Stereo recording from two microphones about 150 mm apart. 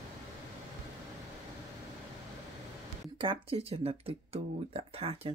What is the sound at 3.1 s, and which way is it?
Speech, 40° right (ahead or behind).